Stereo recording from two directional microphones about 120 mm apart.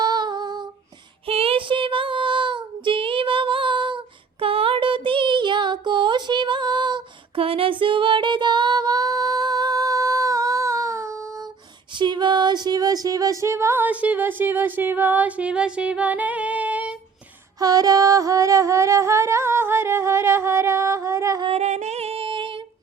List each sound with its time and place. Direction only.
0.0 s female singing: 35° right (ahead or behind)
1.3 s child singing: 50° right (ahead or behind); by 11.4 s 25° right (ahead or behind)
11.9 s a sound: 40° right (ahead or behind); by 17.0 s 10° right (ahead or behind)
17.6 s music: 30° right (ahead or behind)
21.6 s singing: 75° right (ahead or behind); by 22.6 s 45° right (ahead or behind)